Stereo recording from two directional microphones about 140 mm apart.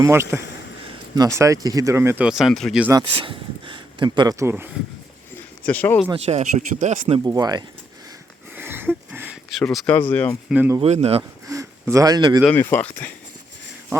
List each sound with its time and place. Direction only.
0.0 s speech: 20° right (ahead or behind)
2.2 s speech: centre (ahead or behind)
3.2 s speech: 35° right (ahead or behind); by 4.7 s 15° right (ahead or behind)
5.6 s speech: 10° left (ahead or behind)
6.1 s speech: 50° right (ahead or behind)
7.3 s speech: 25° right (ahead or behind)
8.5 s a sound: 15° right (ahead or behind)
9.5 s speech: centre (ahead or behind)
10.8 s speech: 50° right (ahead or behind)
11.2 s speech: 25° right (ahead or behind)
12.5 s speech: 10° left (ahead or behind)